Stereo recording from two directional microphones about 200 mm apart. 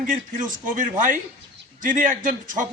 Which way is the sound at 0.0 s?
40° right (ahead or behind).